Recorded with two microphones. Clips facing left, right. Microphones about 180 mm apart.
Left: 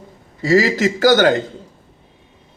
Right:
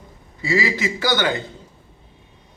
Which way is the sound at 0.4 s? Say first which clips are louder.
Left 7 dB; 40° left (ahead or behind).